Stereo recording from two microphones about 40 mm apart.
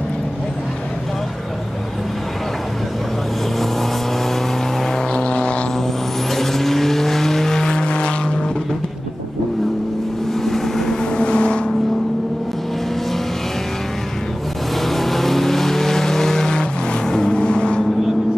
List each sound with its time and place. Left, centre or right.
5.1 s vehicle: left
6.3 s vehicle: centre; by 8.1 s left
10.4 s vehicle: centre
11.1 s vehicle: left
14.9 s vehicle: centre; by 17.8 s left